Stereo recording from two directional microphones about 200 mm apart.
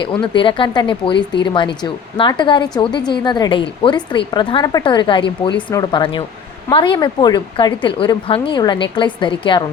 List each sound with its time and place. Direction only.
0.0 s a woman's voice: 25° left (ahead or behind)